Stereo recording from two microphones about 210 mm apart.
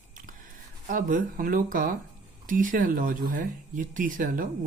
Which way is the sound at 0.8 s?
40° right (ahead or behind).